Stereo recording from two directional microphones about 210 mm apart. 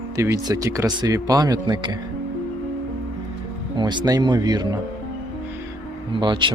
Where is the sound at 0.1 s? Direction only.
15° right (ahead or behind).